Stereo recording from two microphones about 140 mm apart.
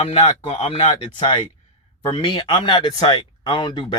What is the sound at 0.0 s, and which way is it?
Speech, 45° left (ahead or behind).